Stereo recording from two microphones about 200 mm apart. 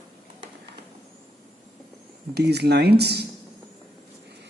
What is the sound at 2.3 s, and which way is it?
Speech, 55° right (ahead or behind).